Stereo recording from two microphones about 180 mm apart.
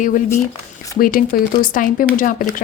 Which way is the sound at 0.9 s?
50° left (ahead or behind).